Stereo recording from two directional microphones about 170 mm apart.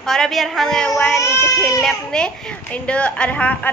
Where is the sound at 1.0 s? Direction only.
15° left (ahead or behind).